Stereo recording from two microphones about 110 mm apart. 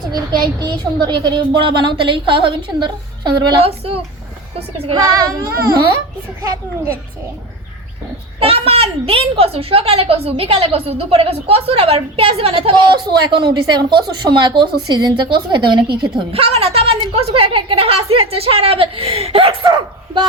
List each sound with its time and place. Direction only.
0.1 s a woman's voice: 40° right (ahead or behind)
3.6 s a woman's voice: 60° right (ahead or behind)
5.0 s a child's voice: 35° right (ahead or behind)
8.4 s a woman's voice: 65° right (ahead or behind)
13.1 s a woman's voice: 45° right (ahead or behind)